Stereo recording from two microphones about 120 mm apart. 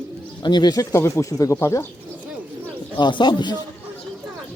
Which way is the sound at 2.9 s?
40° left (ahead or behind).